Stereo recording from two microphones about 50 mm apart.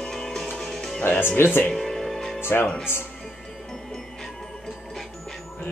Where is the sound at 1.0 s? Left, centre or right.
Left.